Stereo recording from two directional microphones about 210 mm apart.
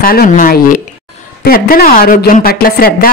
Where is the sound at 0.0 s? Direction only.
45° left (ahead or behind).